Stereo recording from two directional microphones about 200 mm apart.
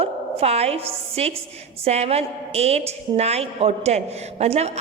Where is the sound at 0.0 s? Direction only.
30° right (ahead or behind).